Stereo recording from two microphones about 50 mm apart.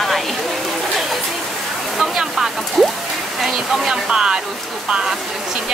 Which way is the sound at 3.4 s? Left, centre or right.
Centre.